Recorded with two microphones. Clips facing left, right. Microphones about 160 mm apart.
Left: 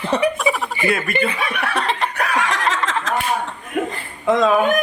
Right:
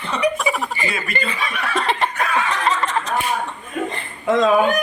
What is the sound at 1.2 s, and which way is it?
Neigh, 65° left (ahead or behind).